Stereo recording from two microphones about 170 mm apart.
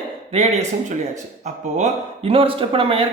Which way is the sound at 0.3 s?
45° right (ahead or behind).